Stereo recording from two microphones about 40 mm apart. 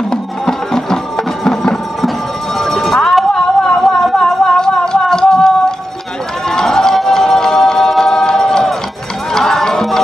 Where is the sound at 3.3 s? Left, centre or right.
Centre.